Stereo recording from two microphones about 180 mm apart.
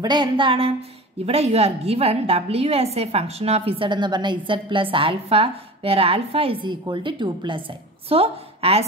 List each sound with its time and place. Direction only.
0.0 s a woman's voice: 25° right (ahead or behind)